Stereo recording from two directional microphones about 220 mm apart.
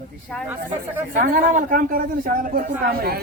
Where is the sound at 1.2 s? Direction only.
40° right (ahead or behind).